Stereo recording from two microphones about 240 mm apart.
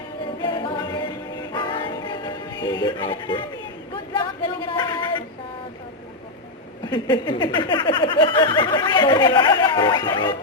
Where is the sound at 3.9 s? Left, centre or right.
Centre.